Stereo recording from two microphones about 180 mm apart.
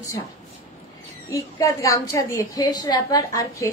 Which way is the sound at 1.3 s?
15° left (ahead or behind).